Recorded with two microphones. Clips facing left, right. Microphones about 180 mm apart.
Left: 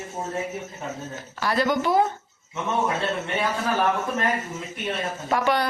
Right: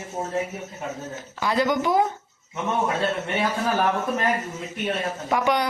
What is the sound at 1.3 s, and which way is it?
Speech, 15° right (ahead or behind).